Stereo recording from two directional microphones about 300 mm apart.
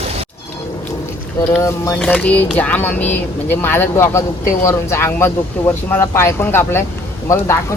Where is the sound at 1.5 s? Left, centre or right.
Centre.